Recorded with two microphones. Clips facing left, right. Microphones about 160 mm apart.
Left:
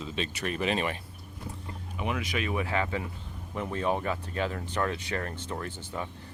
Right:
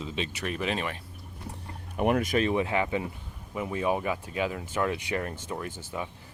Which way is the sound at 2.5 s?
20° right (ahead or behind).